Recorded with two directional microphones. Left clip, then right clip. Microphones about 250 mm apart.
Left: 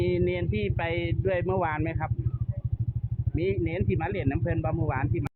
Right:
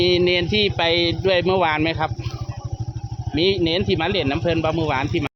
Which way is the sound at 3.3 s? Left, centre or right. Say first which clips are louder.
Right 10 dB; right.